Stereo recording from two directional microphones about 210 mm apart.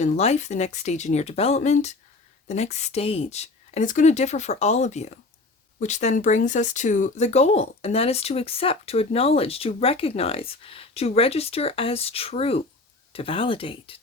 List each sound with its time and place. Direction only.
0.0 s speech: 30° left (ahead or behind)